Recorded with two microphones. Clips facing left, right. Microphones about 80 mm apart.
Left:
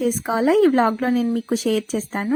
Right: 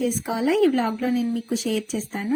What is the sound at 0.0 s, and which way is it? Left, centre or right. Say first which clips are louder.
A woman's voice: left 4 dB; left.